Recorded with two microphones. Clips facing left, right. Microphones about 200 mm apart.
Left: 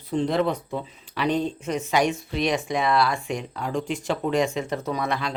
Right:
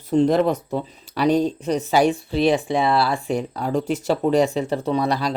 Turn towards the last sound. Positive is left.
turn(degrees=-35)  # may be behind; listen again after turning